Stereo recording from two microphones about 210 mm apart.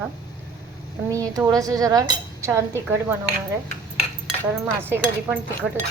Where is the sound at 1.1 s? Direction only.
15° right (ahead or behind).